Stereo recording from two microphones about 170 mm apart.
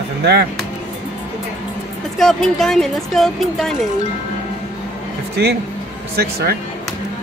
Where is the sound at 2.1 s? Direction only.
Centre (ahead or behind).